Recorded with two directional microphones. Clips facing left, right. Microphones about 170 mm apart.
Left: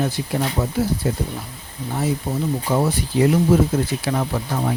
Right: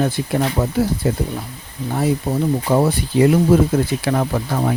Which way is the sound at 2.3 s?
65° right (ahead or behind).